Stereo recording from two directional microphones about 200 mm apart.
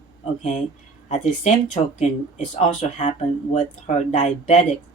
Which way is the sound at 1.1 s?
35° left (ahead or behind).